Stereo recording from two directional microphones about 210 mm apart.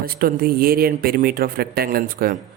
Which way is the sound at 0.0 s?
45° right (ahead or behind).